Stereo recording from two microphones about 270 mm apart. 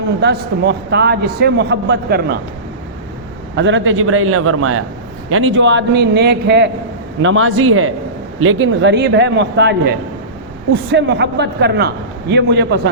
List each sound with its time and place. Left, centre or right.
0.2 s a man's voice: right
3.5 s a man's voice: right